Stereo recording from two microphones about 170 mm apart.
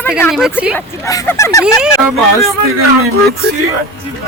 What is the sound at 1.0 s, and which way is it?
Speech, 20° left (ahead or behind).